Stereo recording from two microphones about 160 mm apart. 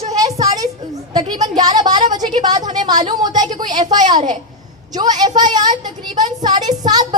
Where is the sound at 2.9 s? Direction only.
25° right (ahead or behind).